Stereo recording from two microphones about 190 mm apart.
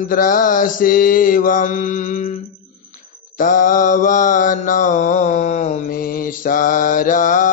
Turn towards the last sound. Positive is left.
turn(degrees=45)  # may be behind; listen again after turning